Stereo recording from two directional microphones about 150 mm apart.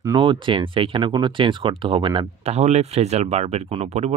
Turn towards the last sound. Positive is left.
turn(degrees=-45)  # may be behind; listen again after turning